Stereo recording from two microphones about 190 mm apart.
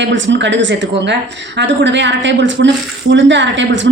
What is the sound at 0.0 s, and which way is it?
A woman's voice, 75° right (ahead or behind).